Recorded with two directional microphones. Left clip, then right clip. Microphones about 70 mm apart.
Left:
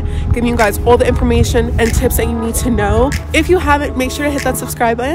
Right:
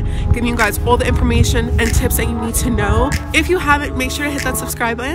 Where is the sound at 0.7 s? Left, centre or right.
Right.